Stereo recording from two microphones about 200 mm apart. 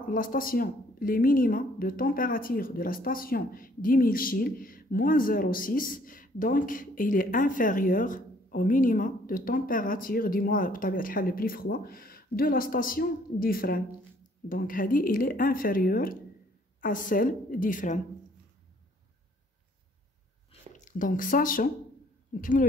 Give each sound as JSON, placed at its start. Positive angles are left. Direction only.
{"t": 0.0, "sound": "speech", "side_deg": 45}
{"t": 20.7, "sound": "speech", "side_deg": 40}